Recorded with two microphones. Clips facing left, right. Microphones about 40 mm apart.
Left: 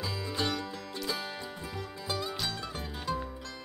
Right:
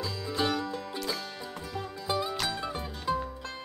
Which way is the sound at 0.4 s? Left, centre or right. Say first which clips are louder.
Right 5 dB; centre.